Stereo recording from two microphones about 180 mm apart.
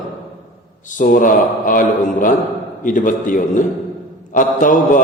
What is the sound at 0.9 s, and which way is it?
Mantra, 50° left (ahead or behind).